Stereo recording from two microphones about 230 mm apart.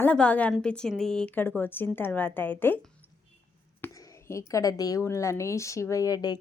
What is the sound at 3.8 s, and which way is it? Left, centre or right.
Whispering, centre.